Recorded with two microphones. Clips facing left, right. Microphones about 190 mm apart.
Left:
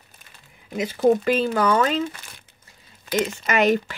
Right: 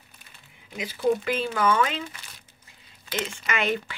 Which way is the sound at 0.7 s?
45° left (ahead or behind).